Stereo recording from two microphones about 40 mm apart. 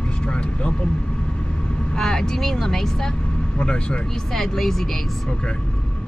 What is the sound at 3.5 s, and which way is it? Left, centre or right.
Speech, left.